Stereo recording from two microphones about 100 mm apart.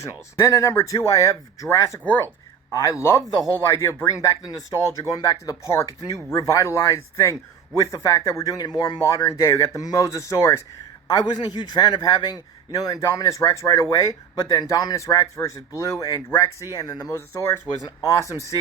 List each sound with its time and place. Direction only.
0.0 s a man's voice: 30° left (ahead or behind)
11.1 s a man's voice: 40° left (ahead or behind)
17.2 s a man's voice: 25° left (ahead or behind)